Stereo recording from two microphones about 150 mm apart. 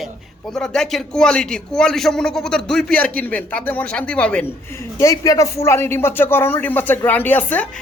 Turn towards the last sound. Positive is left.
turn(degrees=10)  # may be behind; listen again after turning